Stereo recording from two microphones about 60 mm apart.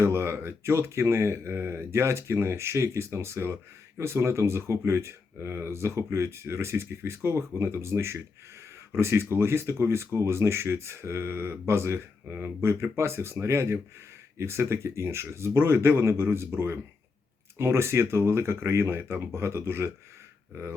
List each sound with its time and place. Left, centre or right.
0.0 s speech: right